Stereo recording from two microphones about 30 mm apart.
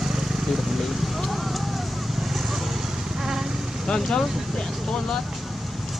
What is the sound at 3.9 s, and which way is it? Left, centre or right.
Speech, left.